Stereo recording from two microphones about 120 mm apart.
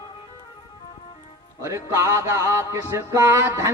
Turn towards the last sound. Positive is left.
turn(degrees=-20)  # may be behind; listen again after turning